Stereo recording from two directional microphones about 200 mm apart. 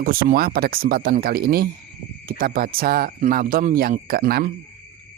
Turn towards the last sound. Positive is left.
turn(degrees=-45)  # may be behind; listen again after turning